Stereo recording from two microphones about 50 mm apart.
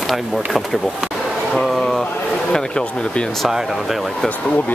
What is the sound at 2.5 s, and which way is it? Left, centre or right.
Speech, centre.